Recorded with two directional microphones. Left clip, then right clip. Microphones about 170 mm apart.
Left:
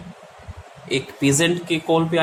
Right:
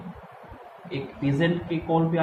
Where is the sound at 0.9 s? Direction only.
60° left (ahead or behind).